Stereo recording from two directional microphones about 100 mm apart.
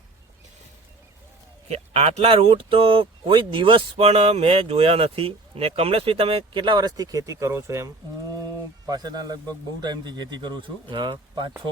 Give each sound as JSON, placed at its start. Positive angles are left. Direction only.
{"t": 1.6, "sound": "speech", "side_deg": -90}
{"t": 8.9, "sound": "a man's voice", "side_deg": -40}